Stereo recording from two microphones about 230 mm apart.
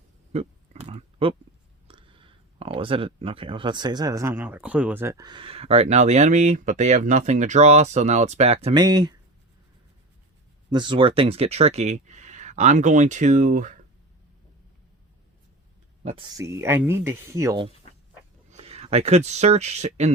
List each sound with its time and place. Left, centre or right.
0.3 s pig: right
1.9 s speech: right
10.7 s speech: centre
16.0 s speech: right
18.5 s speech: right